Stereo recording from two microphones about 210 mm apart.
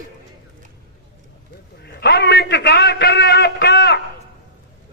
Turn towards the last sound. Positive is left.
turn(degrees=50)  # may be behind; listen again after turning